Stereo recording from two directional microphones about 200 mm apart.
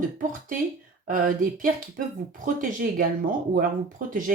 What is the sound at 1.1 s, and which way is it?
Speech, 45° right (ahead or behind).